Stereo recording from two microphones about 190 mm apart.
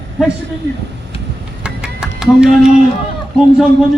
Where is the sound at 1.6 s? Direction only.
5° right (ahead or behind).